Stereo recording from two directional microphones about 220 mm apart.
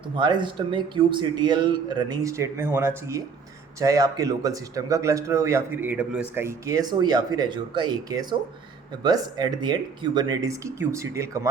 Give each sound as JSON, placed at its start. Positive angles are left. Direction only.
{"t": 0.1, "sound": "a man's voice", "side_deg": -20}